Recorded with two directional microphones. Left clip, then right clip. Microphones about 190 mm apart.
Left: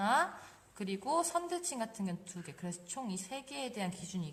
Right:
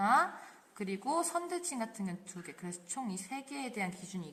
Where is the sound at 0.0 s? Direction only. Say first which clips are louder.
Right 2 dB; 20° left (ahead or behind).